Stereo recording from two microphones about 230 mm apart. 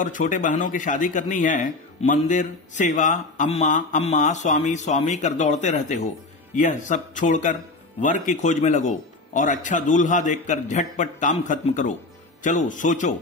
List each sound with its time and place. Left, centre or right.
0.0 s speech: left